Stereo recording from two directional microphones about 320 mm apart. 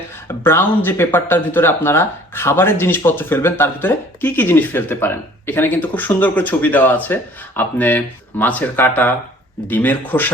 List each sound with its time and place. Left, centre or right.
0.3 s speech: centre